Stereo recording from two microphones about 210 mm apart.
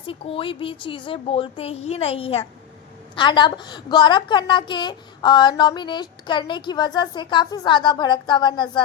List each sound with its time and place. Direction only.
0.0 s a woman's voice: 25° left (ahead or behind)